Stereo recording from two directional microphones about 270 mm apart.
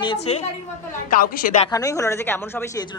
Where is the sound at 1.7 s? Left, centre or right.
Centre.